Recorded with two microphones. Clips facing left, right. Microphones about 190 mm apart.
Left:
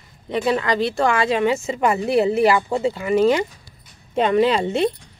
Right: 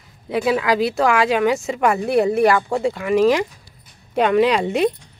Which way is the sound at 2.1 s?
55° right (ahead or behind).